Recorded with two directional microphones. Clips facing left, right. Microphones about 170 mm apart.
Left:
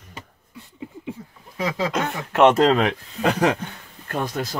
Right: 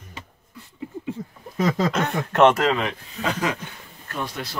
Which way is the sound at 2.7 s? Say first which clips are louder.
Left 5 dB; 60° left (ahead or behind).